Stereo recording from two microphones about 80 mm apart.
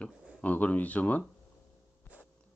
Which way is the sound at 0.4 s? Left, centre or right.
Centre.